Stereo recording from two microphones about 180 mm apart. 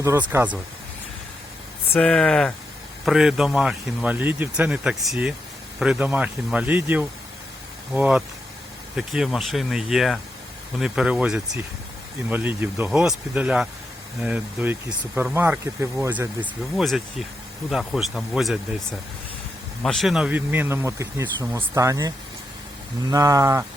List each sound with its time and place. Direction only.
0.0 s speech: 10° right (ahead or behind)
1.9 s speech: 5° left (ahead or behind)
19.8 s speech: centre (ahead or behind); by 23.6 s 15° right (ahead or behind)